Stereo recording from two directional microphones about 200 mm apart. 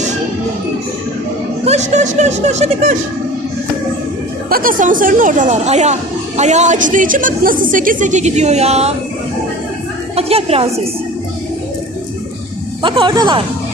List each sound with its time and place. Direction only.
1.6 s a sound: 35° right (ahead or behind)
4.4 s speech: 45° right (ahead or behind)
10.2 s speech: 30° right (ahead or behind)
12.8 s speech: 25° right (ahead or behind)